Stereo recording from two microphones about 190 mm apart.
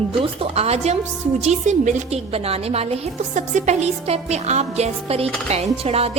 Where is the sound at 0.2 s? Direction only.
30° right (ahead or behind).